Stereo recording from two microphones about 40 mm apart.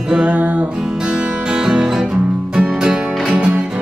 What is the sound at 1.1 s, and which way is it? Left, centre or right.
Music, centre.